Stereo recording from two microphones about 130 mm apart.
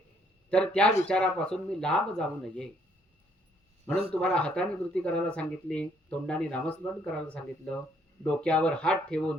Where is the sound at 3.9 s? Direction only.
45° right (ahead or behind).